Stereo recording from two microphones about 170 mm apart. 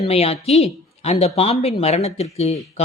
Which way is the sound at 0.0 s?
35° left (ahead or behind).